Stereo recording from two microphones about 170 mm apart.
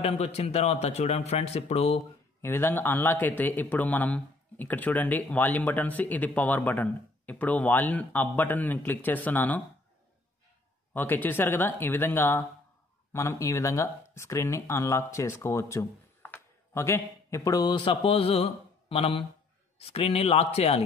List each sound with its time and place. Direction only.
0.0 s speech: 35° left (ahead or behind)
2.4 s a man's voice: 15° left (ahead or behind)
10.9 s a man's voice: 10° left (ahead or behind); by 20.8 s 35° left (ahead or behind)